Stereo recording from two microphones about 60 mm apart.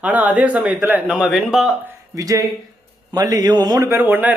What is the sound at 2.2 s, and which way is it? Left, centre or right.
Speech, right.